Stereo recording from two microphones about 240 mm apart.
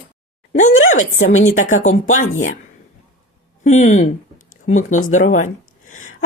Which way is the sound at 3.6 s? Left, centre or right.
Left.